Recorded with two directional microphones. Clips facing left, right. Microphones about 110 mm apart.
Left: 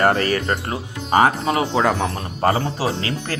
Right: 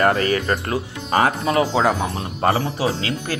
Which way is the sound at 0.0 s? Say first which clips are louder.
Even; 35° left (ahead or behind).